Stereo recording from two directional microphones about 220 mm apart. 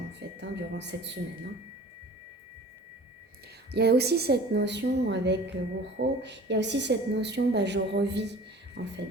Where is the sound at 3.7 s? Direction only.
50° right (ahead or behind).